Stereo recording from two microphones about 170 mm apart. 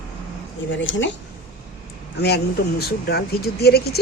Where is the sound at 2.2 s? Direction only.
75° left (ahead or behind).